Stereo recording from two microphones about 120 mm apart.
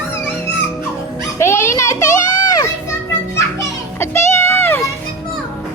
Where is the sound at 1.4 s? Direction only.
25° left (ahead or behind).